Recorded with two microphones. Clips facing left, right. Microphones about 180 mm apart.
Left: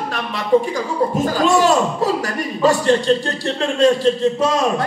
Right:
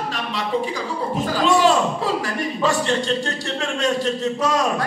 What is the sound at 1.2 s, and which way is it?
A man's voice, 45° left (ahead or behind).